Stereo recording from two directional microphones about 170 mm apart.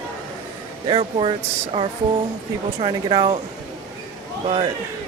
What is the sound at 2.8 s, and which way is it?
Speech, 30° right (ahead or behind).